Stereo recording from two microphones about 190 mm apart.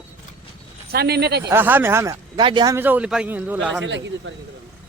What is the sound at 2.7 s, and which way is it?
Speech, 10° right (ahead or behind).